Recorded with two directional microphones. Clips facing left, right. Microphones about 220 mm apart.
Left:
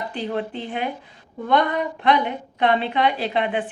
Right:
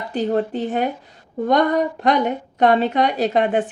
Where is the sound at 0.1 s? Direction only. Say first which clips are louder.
Right 11 dB; 45° right (ahead or behind).